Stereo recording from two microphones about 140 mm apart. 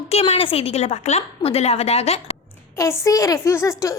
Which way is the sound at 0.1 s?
45° left (ahead or behind).